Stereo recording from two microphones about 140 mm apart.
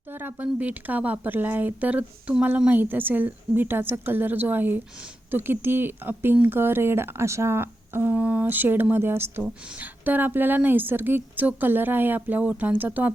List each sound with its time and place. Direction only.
0.1 s a woman's voice: 15° right (ahead or behind)